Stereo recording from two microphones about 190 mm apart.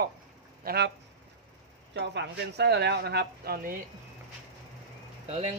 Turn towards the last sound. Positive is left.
turn(degrees=-35)  # may be behind; listen again after turning